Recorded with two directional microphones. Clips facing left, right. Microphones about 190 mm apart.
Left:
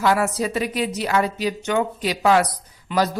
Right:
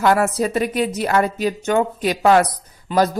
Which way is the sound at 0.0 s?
50° right (ahead or behind).